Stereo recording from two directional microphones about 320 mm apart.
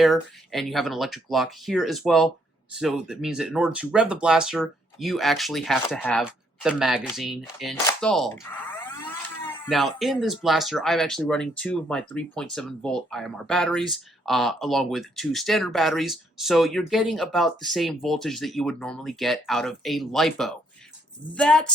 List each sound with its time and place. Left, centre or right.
0.0 s speech: centre